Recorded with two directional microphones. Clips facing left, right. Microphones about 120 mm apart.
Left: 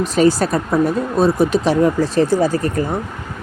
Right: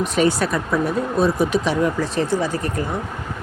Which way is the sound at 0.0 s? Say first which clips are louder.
Left 4 dB; 35° left (ahead or behind).